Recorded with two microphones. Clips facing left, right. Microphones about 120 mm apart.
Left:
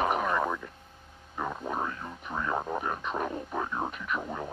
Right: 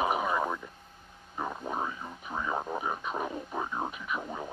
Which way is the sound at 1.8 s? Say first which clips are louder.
Left 1 dB; 10° right (ahead or behind).